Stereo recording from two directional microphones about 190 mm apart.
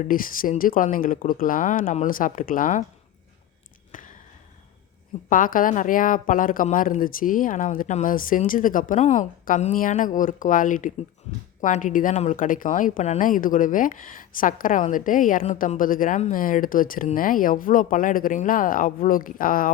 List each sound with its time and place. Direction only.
0.0 s a woman's voice: 45° left (ahead or behind)
3.9 s a sound: 45° left (ahead or behind)
5.3 s a woman's voice: 45° left (ahead or behind)
12.1 s speech: 30° left (ahead or behind)
12.4 s a woman's voice: 45° left (ahead or behind)